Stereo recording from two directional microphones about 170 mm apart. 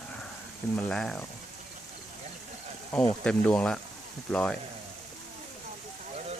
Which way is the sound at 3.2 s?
5° left (ahead or behind).